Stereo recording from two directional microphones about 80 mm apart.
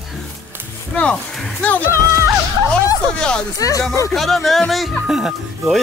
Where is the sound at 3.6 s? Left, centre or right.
Left.